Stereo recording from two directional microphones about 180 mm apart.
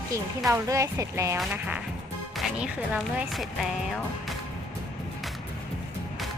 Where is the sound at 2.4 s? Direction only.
5° right (ahead or behind).